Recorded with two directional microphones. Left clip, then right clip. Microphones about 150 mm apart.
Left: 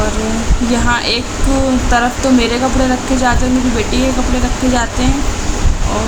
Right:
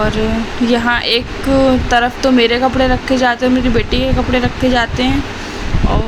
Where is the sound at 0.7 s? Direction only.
15° right (ahead or behind).